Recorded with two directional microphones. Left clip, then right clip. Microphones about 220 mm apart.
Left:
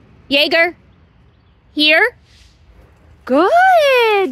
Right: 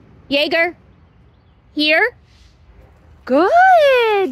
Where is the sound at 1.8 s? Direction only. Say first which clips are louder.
Left 3 dB; 15° left (ahead or behind).